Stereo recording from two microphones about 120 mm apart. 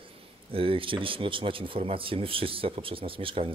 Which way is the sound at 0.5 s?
50° right (ahead or behind).